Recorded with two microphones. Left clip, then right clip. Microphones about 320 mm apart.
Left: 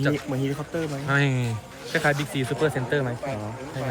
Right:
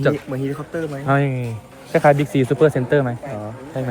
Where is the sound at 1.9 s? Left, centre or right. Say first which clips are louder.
Right 9 dB; centre.